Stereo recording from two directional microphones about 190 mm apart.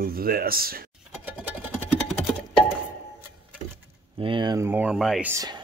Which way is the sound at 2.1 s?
Centre (ahead or behind).